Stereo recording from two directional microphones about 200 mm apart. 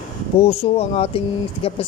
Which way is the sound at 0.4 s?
30° left (ahead or behind).